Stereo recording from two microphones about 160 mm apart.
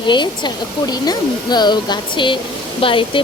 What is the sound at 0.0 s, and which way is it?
Speech, 30° left (ahead or behind).